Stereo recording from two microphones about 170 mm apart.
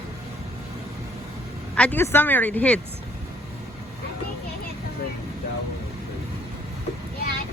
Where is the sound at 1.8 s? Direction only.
10° left (ahead or behind).